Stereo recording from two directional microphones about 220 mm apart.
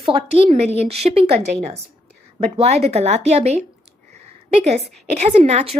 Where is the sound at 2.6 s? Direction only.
30° right (ahead or behind).